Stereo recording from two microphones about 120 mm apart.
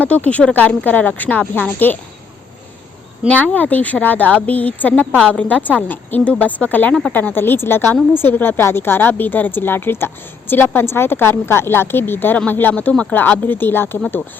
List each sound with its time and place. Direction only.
0.0 s speech: 10° left (ahead or behind)
3.2 s speech: 10° left (ahead or behind)